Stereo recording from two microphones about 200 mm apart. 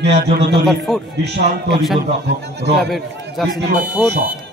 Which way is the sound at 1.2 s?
60° right (ahead or behind).